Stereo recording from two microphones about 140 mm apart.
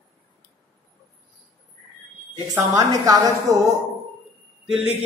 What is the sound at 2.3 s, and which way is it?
A woman's voice, 25° right (ahead or behind).